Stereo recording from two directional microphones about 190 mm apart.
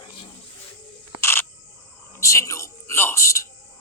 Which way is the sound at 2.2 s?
15° left (ahead or behind).